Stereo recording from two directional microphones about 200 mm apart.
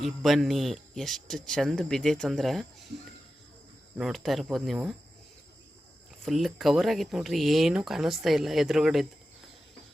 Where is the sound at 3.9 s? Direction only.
Centre (ahead or behind).